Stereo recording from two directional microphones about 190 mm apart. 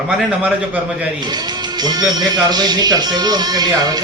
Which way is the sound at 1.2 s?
20° right (ahead or behind).